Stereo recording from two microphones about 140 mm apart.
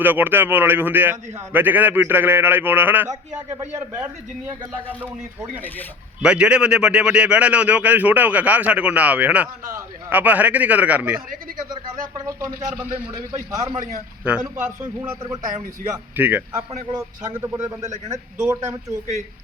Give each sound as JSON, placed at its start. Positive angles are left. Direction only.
{"t": 0.0, "sound": "a man's voice", "side_deg": -15}
{"t": 6.2, "sound": "a man's voice", "side_deg": -5}
{"t": 9.6, "sound": "a man's voice", "side_deg": -20}
{"t": 10.2, "sound": "a man's voice", "side_deg": -10}
{"t": 11.7, "sound": "a man's voice", "side_deg": -25}
{"t": 14.3, "sound": "a man's voice", "side_deg": -10}
{"t": 15.9, "sound": "a man's voice", "side_deg": -10}
{"t": 16.5, "sound": "a man's voice", "side_deg": -25}